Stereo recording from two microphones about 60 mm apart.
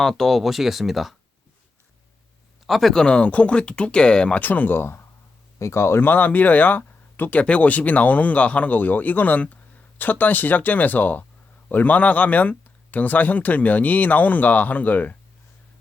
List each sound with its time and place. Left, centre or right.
0.0 s speech: centre
2.6 s speech: centre
2.9 s speech: centre
4.4 s speech: left
5.5 s speech: left